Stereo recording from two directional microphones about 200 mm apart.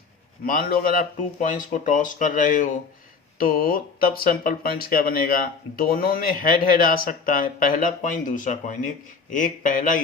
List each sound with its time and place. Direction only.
0.4 s speech: 45° left (ahead or behind)